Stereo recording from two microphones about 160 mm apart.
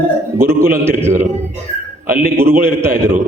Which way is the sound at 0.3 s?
15° right (ahead or behind).